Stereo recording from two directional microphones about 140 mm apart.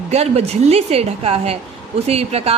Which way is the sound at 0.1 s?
50° right (ahead or behind).